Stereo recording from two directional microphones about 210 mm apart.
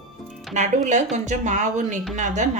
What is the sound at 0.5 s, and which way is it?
Speech, 35° right (ahead or behind).